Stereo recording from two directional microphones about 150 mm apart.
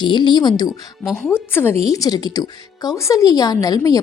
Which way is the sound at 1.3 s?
15° left (ahead or behind).